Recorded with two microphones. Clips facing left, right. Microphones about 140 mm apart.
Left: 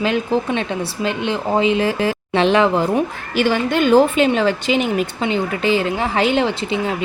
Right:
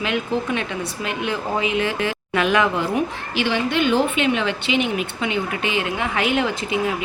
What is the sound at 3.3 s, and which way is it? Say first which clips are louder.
Speech: left 4 dB; 45° left (ahead or behind).